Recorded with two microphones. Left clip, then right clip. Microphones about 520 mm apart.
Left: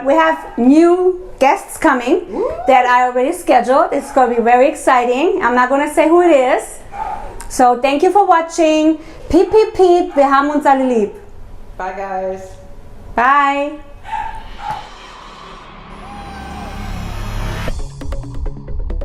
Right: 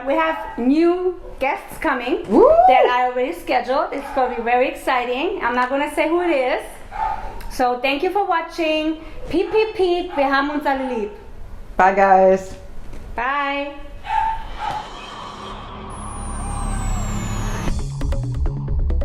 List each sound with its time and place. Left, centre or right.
0.0 s a woman's voice: left
11.8 s a woman's voice: right
13.1 s a woman's voice: left
17.7 s music: centre